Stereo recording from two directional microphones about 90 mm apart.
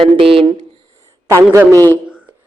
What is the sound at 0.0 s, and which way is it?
Speech, 85° right.